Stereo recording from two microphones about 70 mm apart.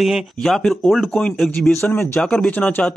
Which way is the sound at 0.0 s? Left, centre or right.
Centre.